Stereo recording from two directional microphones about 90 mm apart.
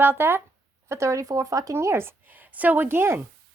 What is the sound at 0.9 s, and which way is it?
A woman's voice, 35° right (ahead or behind).